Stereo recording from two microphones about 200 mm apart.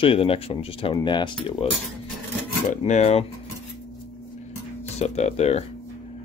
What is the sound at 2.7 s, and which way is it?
Speech, 35° left (ahead or behind).